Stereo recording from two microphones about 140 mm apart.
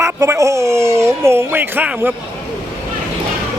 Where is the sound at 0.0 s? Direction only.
20° right (ahead or behind).